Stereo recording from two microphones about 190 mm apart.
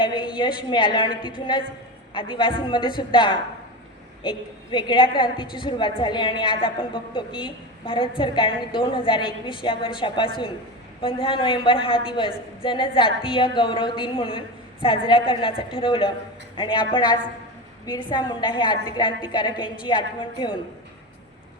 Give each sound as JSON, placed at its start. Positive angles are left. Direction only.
{"t": 0.0, "sound": "a woman's voice", "side_deg": 25}